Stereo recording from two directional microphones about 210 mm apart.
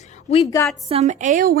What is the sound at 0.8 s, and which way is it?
Speech, 30° right (ahead or behind).